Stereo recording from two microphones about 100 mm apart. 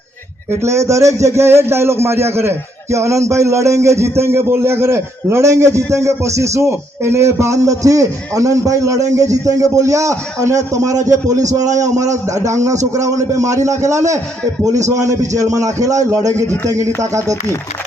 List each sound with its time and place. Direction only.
0.6 s a man's voice: 30° right (ahead or behind)